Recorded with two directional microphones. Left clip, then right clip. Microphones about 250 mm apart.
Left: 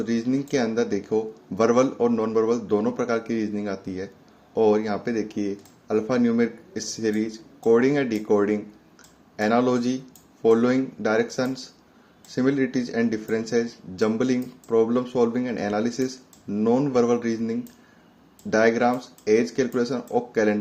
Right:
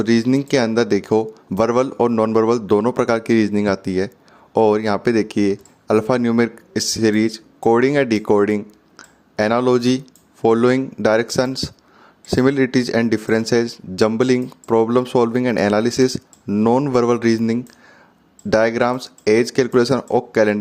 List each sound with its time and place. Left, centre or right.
0.0 s speech: right